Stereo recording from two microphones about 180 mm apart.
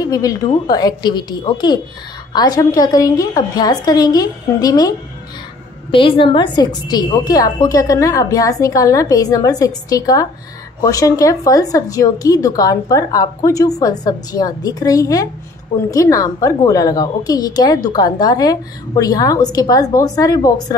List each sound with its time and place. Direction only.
0.0 s a woman's voice: 20° left (ahead or behind)